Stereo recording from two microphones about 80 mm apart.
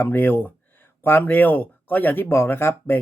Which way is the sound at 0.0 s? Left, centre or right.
Left.